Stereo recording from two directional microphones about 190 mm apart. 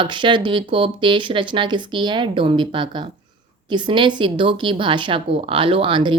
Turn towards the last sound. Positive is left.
turn(degrees=-25)  # may be behind; listen again after turning